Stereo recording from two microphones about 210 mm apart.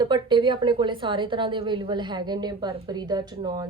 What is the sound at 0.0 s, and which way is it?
A woman's voice, 20° right (ahead or behind).